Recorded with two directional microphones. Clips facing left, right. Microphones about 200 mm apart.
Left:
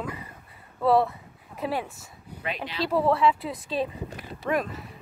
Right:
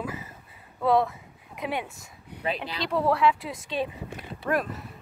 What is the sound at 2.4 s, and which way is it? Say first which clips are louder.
Speech: right 3 dB; 35° right (ahead or behind).